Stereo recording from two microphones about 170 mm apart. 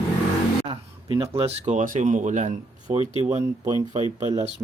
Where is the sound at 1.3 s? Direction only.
40° right (ahead or behind).